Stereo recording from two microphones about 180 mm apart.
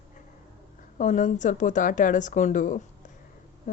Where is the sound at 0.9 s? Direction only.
45° left (ahead or behind).